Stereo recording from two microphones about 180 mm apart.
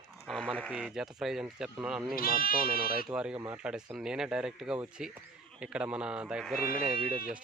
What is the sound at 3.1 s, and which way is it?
Speech, 5° right (ahead or behind).